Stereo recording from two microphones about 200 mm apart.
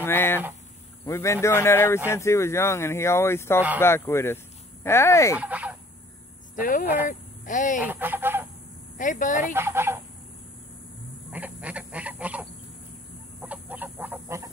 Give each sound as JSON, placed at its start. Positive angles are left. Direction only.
{"t": 0.0, "sound": "a sound", "side_deg": 10}
{"t": 1.0, "sound": "speech", "side_deg": 15}
{"t": 5.4, "sound": "fowl", "side_deg": -5}
{"t": 6.5, "sound": "speech", "side_deg": 45}
{"t": 7.8, "sound": "fowl", "side_deg": -10}
{"t": 8.9, "sound": "speech", "side_deg": 40}
{"t": 9.5, "sound": "fowl", "side_deg": -10}
{"t": 11.3, "sound": "duck", "side_deg": -5}
{"t": 13.4, "sound": "chicken", "side_deg": -10}